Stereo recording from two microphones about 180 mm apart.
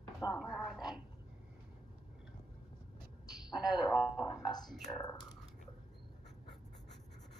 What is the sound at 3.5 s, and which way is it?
Speech, centre (ahead or behind).